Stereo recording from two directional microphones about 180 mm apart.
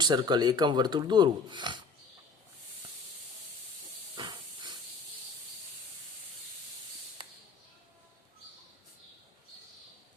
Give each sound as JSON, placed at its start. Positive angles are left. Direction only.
{"t": 0.0, "sound": "speech", "side_deg": -25}
{"t": 4.2, "sound": "hiss", "side_deg": -25}